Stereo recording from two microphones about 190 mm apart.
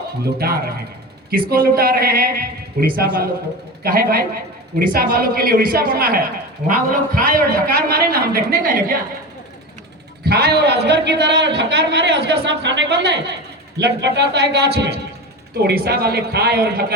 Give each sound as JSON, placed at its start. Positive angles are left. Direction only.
{"t": 0.3, "sound": "a woman's voice", "side_deg": -55}
{"t": 10.2, "sound": "a man's voice", "side_deg": -60}